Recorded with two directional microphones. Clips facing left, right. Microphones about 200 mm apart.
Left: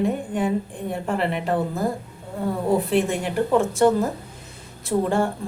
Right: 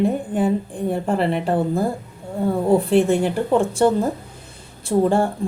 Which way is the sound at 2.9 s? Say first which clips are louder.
Right 5 dB; 30° right (ahead or behind).